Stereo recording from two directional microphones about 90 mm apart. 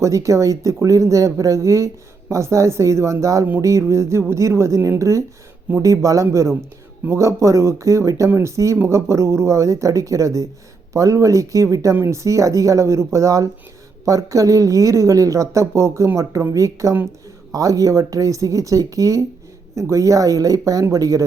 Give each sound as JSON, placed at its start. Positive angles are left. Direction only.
{"t": 0.0, "sound": "a woman's voice", "side_deg": -35}